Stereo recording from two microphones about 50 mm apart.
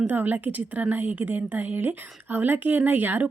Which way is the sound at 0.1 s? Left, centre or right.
Right.